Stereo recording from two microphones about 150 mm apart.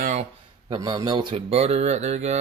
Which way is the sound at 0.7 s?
25° right (ahead or behind).